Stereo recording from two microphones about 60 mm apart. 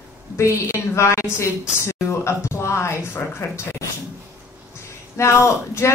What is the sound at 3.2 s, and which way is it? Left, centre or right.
Speech, left.